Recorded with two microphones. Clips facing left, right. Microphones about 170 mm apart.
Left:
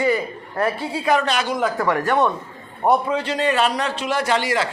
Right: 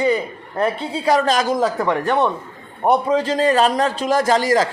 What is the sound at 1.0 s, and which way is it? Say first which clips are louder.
Speech: right 4 dB; 40° right (ahead or behind).